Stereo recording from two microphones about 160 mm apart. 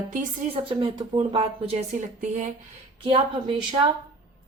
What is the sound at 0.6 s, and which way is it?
Speech, 30° right (ahead or behind).